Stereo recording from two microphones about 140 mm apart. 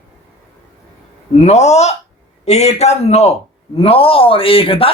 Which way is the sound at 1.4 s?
50° left (ahead or behind).